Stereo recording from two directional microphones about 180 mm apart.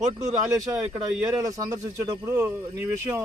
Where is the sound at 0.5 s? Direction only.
20° right (ahead or behind).